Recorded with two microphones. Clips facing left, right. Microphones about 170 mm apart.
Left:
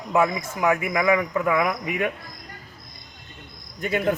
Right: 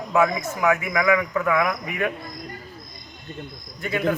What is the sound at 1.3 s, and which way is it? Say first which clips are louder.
Speech: even; 15° left (ahead or behind).